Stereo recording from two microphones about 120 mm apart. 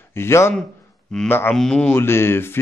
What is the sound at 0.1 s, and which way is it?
Speech, 20° left (ahead or behind).